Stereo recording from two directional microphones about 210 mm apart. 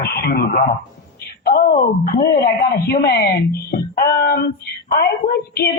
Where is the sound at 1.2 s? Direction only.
45° left (ahead or behind).